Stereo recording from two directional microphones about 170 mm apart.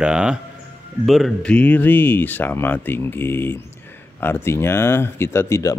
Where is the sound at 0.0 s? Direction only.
5° right (ahead or behind).